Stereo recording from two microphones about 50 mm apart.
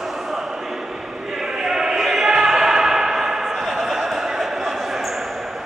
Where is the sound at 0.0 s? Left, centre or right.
Centre.